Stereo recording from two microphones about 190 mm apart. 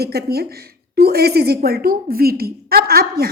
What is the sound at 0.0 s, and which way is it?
A woman's voice, 55° right (ahead or behind).